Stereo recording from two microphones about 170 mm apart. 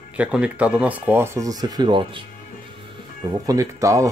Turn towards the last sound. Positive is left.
turn(degrees=-20)  # may be behind; listen again after turning